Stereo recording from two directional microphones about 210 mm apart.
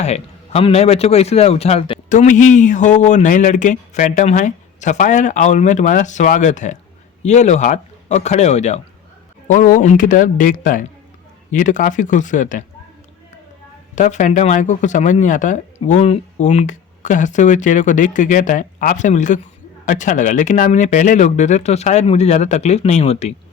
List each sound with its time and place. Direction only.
0.0 s a man's voice: 30° left (ahead or behind)
13.9 s a man's voice: 35° left (ahead or behind)